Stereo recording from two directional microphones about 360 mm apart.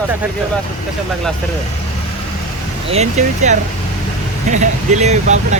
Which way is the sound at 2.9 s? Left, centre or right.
Centre.